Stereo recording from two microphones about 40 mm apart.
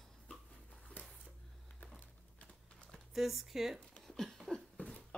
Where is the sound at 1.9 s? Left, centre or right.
Left.